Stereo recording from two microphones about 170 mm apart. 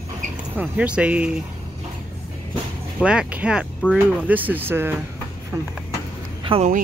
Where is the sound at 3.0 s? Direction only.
5° right (ahead or behind).